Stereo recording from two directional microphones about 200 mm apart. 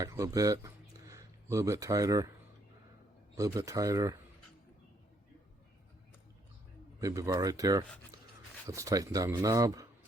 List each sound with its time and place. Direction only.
0.0 s speech: 15° right (ahead or behind)
3.3 s speech: 15° right (ahead or behind)
7.0 s speech: 15° right (ahead or behind)
8.1 s a sound: 15° right (ahead or behind)
8.6 s speech: 15° right (ahead or behind)